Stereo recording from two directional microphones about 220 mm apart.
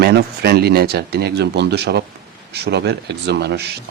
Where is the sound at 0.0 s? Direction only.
45° right (ahead or behind).